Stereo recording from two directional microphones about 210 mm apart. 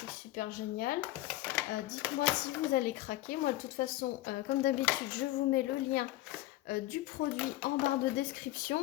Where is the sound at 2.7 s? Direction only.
45° left (ahead or behind).